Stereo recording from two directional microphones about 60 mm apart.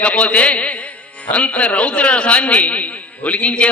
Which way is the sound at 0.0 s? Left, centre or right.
Left.